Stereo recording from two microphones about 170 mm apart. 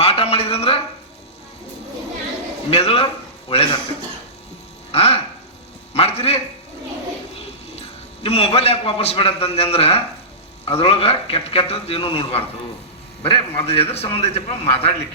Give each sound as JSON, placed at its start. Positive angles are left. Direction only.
{"t": 0.0, "sound": "a sound", "side_deg": 35}
{"t": 2.6, "sound": "a man's voice", "side_deg": 35}
{"t": 4.9, "sound": "a man's voice", "side_deg": 35}